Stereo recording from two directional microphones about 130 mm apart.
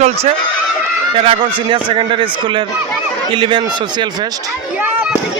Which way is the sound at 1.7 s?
40° right (ahead or behind).